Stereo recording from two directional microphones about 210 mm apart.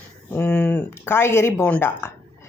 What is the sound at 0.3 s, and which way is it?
A woman's voice, 10° left (ahead or behind).